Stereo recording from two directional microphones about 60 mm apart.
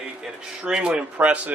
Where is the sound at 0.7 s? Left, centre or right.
Centre.